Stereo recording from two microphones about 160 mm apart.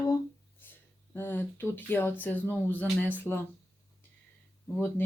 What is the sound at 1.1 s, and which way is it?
Speech, 15° left (ahead or behind).